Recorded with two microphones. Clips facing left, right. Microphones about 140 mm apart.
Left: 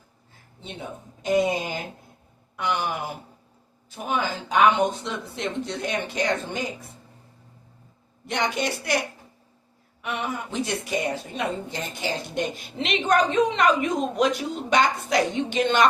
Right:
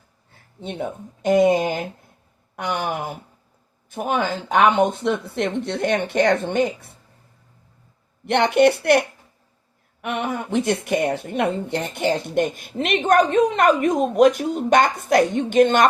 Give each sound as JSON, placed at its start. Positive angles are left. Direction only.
{"t": 0.6, "sound": "a woman's voice", "side_deg": -55}
{"t": 8.3, "sound": "a woman's voice", "side_deg": -60}